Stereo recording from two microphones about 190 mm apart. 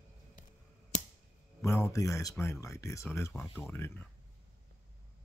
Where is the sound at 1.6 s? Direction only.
15° left (ahead or behind).